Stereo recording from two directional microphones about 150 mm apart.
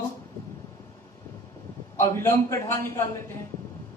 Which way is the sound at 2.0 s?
20° left (ahead or behind).